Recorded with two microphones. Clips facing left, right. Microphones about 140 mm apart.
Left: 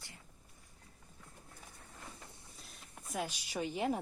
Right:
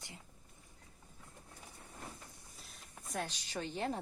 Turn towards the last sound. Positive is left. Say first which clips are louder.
# left 3 dB
turn(degrees=10)  # may be behind; listen again after turning